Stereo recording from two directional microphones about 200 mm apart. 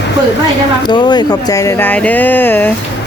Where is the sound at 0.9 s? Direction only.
20° left (ahead or behind).